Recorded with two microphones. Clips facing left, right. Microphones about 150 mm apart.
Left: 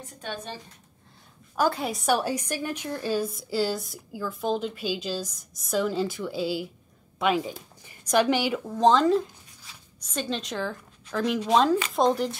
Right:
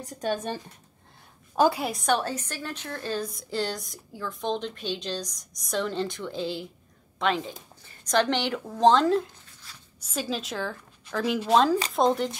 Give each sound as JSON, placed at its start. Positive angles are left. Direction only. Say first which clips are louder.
{"t": 0.0, "sound": "speech", "louder": "right 7 dB", "side_deg": -40}
{"t": 1.7, "sound": "a woman's voice", "louder": "left 1 dB", "side_deg": 0}